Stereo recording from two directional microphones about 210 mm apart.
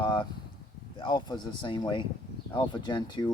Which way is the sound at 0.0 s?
20° left (ahead or behind).